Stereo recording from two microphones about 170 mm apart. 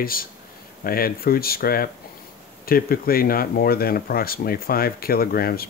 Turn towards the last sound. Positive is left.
turn(degrees=60)  # may be behind; listen again after turning